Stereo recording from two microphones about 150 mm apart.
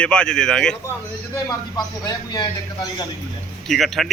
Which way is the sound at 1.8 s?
25° left (ahead or behind).